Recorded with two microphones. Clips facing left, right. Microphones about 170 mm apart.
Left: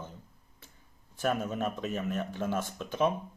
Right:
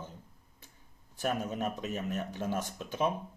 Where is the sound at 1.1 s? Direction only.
15° right (ahead or behind).